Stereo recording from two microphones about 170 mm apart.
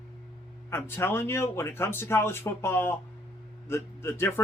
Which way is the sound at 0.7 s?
15° left (ahead or behind).